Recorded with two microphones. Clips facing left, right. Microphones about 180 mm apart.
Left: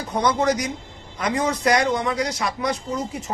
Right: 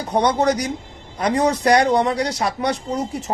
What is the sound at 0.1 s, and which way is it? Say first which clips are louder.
Speech: right 3 dB; 35° right (ahead or behind).